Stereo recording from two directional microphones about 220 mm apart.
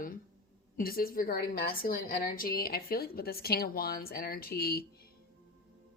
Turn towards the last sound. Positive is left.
turn(degrees=45)  # may be behind; listen again after turning